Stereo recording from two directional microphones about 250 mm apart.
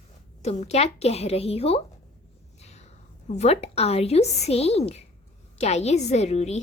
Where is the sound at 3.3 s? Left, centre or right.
Left.